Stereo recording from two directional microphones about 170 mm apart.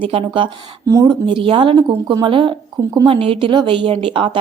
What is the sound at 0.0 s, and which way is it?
A woman's voice, 35° right (ahead or behind).